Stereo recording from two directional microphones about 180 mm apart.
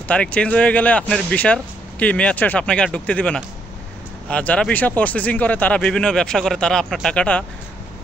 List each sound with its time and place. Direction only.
0.1 s speech: 5° left (ahead or behind)